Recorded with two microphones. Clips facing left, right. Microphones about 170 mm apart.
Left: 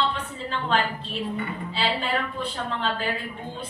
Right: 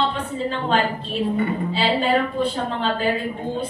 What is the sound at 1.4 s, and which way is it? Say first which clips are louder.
A woman's voice: right 7 dB; 35° right (ahead or behind).